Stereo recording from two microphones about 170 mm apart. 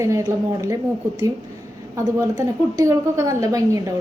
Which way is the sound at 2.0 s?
20° right (ahead or behind).